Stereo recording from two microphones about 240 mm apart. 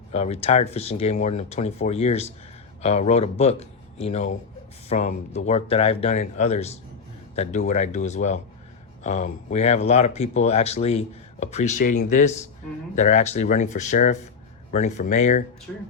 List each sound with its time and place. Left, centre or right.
0.1 s speech: left
15.7 s speech: centre